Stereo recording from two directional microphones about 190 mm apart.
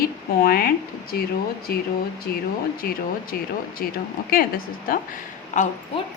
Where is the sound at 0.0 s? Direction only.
50° left (ahead or behind).